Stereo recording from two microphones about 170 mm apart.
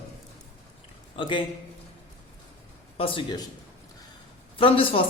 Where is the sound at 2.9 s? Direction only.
30° left (ahead or behind).